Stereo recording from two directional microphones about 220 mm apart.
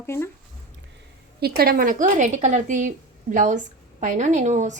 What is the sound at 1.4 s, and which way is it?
A woman's voice, 45° right (ahead or behind).